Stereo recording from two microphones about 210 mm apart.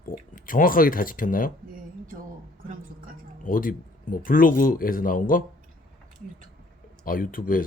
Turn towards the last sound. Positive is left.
turn(degrees=40)  # may be behind; listen again after turning